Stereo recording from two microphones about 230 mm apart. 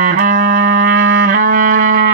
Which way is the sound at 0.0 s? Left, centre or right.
Right.